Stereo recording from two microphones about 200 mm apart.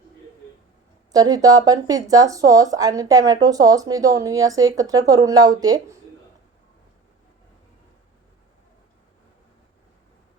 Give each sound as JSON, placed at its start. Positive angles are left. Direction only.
{"t": 1.1, "sound": "speech", "side_deg": -20}